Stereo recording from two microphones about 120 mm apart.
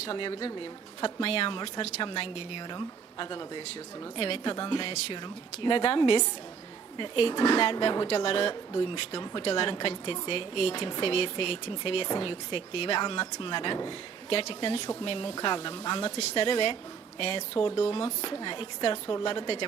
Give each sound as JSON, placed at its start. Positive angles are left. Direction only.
{"t": 0.0, "sound": "a woman's voice", "side_deg": 50}